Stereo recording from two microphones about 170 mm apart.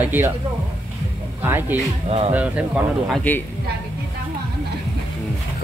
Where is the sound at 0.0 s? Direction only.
10° right (ahead or behind).